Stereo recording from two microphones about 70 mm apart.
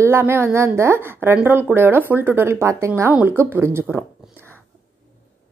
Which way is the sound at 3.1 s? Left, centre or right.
Right.